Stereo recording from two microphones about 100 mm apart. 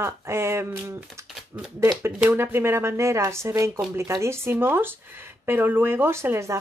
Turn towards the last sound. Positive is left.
turn(degrees=-30)  # may be behind; listen again after turning